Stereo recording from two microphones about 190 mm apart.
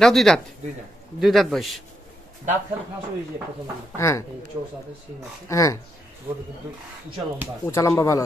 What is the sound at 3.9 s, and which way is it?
Speech, 15° left (ahead or behind).